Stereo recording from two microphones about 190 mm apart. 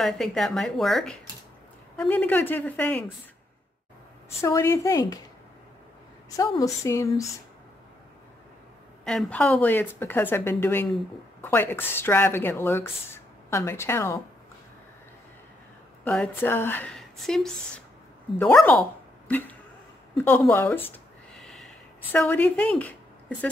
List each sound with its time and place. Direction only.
0.0 s a woman's voice: centre (ahead or behind)
4.4 s speech: 15° left (ahead or behind)
6.3 s speech: 20° left (ahead or behind)
9.0 s speech: 5° left (ahead or behind)
16.0 s speech: 5° left (ahead or behind)
20.2 s a sound: 10° left (ahead or behind)